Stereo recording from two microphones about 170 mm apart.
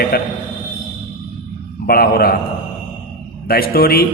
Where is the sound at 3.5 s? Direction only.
60° left (ahead or behind).